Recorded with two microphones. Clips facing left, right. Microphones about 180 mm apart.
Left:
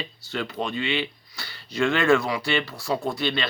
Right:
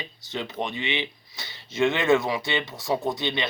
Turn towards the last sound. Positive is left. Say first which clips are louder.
# even
turn(degrees=-20)  # may be behind; listen again after turning